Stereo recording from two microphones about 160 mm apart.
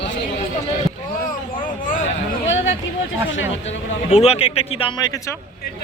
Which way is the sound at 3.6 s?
40° left (ahead or behind).